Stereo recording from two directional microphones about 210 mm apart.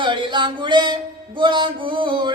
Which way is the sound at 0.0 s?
25° right (ahead or behind).